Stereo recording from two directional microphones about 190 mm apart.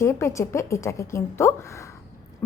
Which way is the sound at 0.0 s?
15° left (ahead or behind).